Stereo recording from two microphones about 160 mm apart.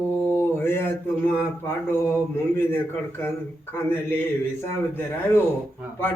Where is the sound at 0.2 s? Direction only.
10° left (ahead or behind).